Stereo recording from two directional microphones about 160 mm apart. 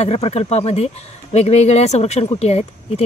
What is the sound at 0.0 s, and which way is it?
Speech, 40° left (ahead or behind).